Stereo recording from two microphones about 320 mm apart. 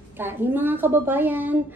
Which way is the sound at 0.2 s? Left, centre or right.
Centre.